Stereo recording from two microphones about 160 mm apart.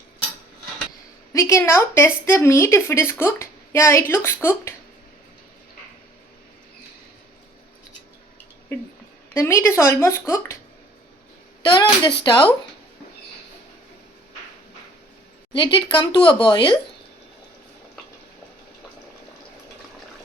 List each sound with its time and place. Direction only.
1.3 s speech: 20° left (ahead or behind)
8.7 s speech: 15° left (ahead or behind)
11.6 s speech: 25° left (ahead or behind)
15.5 s speech: 30° left (ahead or behind)